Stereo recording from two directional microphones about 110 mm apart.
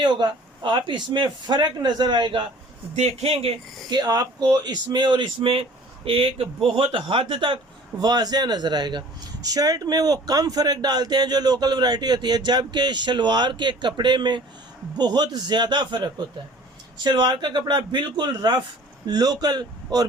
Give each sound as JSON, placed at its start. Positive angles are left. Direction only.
{"t": 0.0, "sound": "a man's voice", "side_deg": -45}
{"t": 2.9, "sound": "speech", "side_deg": -80}
{"t": 3.8, "sound": "a man's voice", "side_deg": -35}